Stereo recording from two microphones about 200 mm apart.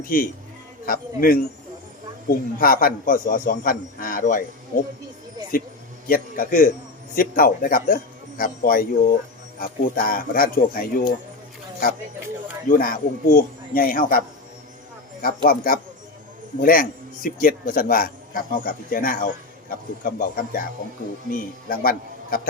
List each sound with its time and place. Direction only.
0.0 s a man's voice: 45° left (ahead or behind)
6.1 s a man's voice: 45° left (ahead or behind)
12.6 s a man's voice: 45° left (ahead or behind)